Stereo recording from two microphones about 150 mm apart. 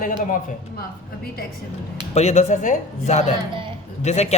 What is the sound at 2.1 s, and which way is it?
A man's voice, 45° left (ahead or behind).